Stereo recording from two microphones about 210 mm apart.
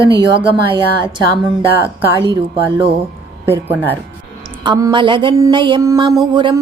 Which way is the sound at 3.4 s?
10° right (ahead or behind).